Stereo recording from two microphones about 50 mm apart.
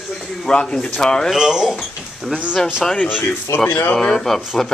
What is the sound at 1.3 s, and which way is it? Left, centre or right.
Speech, centre.